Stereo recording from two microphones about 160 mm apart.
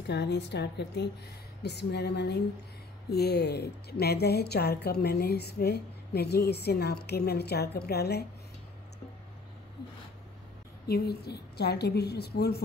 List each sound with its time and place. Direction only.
0.0 s a woman's voice: 90° left
10.9 s a woman's voice: 80° left